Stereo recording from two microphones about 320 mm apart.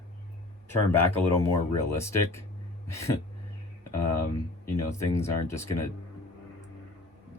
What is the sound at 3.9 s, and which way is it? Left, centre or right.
Speech, left.